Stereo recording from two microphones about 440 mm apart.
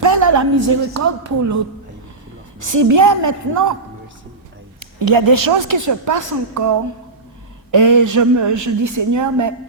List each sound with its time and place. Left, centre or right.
0.0 s a woman's voice: right
2.7 s speech: right
4.8 s a woman's voice: right